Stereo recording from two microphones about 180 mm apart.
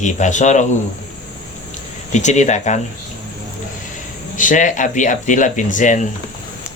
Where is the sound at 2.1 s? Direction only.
40° left (ahead or behind).